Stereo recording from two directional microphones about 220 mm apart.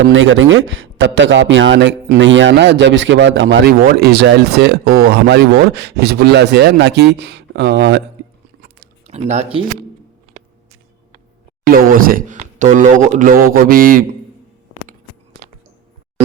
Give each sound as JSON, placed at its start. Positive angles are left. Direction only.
{"t": 0.0, "sound": "speech", "side_deg": -60}
{"t": 3.7, "sound": "speech", "side_deg": -45}
{"t": 8.6, "sound": "a sound", "side_deg": -30}
{"t": 11.6, "sound": "speech", "side_deg": -40}